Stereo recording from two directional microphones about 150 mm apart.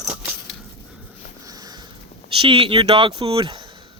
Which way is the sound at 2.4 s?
35° right (ahead or behind).